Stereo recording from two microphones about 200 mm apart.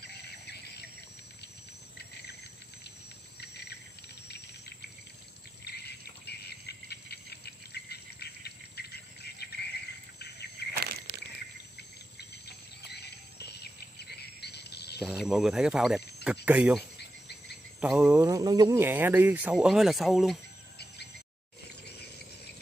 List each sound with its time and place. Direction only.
0.0 s a sound: 55° left (ahead or behind)
3.3 s cricket: 55° left (ahead or behind)
5.7 s jingle bell: 55° left (ahead or behind)
10.1 s cricket: 55° left (ahead or behind)
10.7 s a sound: 50° right (ahead or behind)
12.2 s cricket: 55° left (ahead or behind)
15.0 s speech: centre (ahead or behind)